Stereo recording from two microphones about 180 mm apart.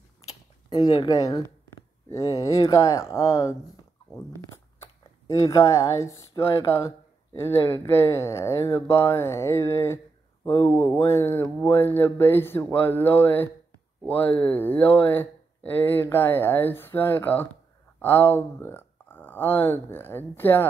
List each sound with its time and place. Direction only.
0.7 s speech: 25° left (ahead or behind)